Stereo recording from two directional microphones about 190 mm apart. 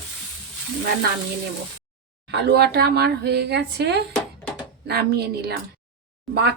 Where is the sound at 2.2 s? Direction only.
60° right (ahead or behind).